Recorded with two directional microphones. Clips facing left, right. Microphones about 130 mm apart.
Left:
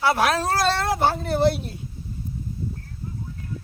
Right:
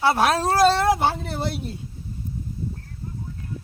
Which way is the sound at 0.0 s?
25° right (ahead or behind).